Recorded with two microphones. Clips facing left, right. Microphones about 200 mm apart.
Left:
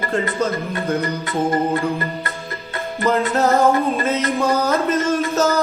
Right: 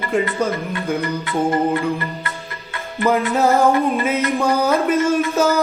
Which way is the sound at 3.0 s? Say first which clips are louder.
Right 1 dB; 10° right (ahead or behind).